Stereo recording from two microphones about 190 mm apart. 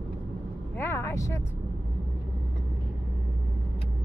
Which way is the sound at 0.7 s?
10° left (ahead or behind).